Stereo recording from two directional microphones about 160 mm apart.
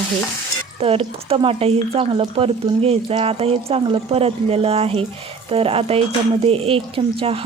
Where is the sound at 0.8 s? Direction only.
35° right (ahead or behind).